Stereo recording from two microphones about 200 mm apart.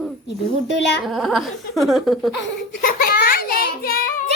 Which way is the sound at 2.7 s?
45° left (ahead or behind).